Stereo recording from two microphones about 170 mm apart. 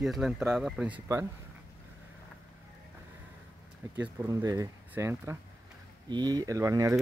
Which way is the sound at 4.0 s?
20° right (ahead or behind).